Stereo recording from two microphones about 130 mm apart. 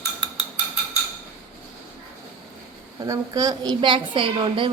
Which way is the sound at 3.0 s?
30° right (ahead or behind).